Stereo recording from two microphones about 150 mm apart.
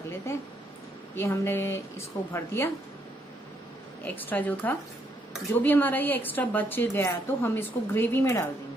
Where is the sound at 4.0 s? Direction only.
10° left (ahead or behind).